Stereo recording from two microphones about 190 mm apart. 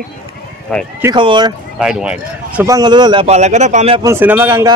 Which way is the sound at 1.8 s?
5° right (ahead or behind).